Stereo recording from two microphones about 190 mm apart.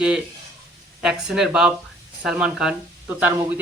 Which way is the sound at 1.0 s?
Centre (ahead or behind).